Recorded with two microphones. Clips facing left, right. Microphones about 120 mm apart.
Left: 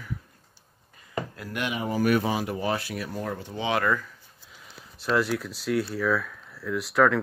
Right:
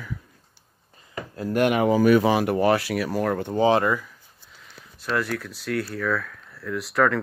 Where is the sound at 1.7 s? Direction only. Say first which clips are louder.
Right 5 dB; 80° right.